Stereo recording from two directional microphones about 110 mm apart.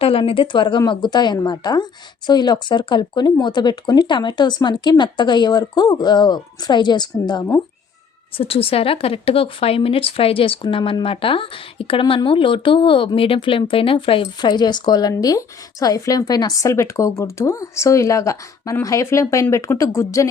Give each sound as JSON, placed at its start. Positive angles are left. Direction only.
{"t": 0.0, "sound": "speech", "side_deg": 60}
{"t": 8.4, "sound": "a woman's voice", "side_deg": 60}
{"t": 14.5, "sound": "speech", "side_deg": 40}